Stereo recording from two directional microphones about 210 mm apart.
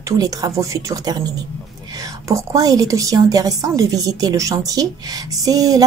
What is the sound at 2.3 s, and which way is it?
A woman's voice, 15° right (ahead or behind).